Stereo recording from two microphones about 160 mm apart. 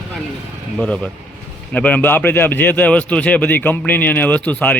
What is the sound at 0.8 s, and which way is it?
A man's voice, 5° left (ahead or behind).